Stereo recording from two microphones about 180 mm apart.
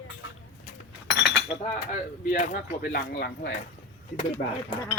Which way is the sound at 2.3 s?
50° left (ahead or behind).